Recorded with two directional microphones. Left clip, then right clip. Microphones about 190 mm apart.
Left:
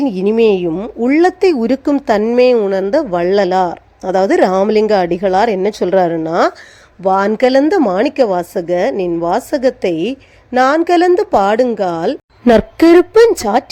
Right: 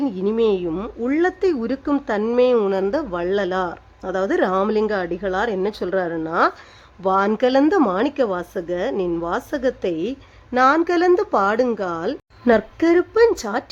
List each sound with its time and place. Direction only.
0.0 s a woman's voice: 25° left (ahead or behind)
12.5 s speech: 35° left (ahead or behind)